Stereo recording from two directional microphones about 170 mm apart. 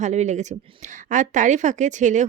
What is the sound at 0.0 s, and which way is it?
Speech, 45° right (ahead or behind).